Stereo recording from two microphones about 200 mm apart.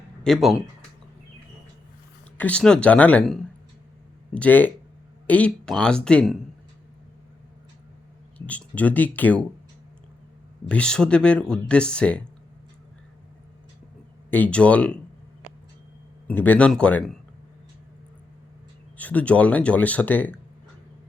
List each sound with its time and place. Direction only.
0.3 s speech: centre (ahead or behind)
2.4 s speech: 5° left (ahead or behind)
8.4 s speech: 5° left (ahead or behind)
10.7 s speech: 5° left (ahead or behind)
14.3 s speech: 10° left (ahead or behind)
16.2 s speech: 10° left (ahead or behind)
18.9 s speech: 10° left (ahead or behind)